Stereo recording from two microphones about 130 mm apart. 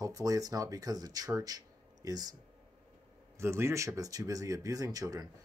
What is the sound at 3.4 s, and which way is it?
Speech, 20° right (ahead or behind).